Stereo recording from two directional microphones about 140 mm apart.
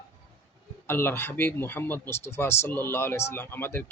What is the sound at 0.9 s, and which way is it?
Speech, 15° left (ahead or behind).